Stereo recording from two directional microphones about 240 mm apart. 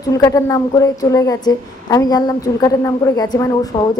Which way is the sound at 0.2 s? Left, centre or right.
Centre.